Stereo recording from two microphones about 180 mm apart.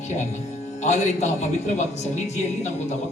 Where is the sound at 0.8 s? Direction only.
40° left (ahead or behind).